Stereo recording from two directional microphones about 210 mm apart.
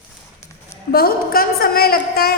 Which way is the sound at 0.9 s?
45° left (ahead or behind).